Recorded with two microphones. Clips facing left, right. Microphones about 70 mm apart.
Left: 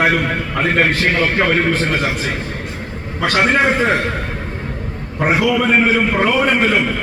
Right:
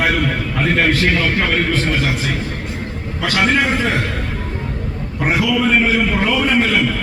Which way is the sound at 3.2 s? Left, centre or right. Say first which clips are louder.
Left 2 dB; left.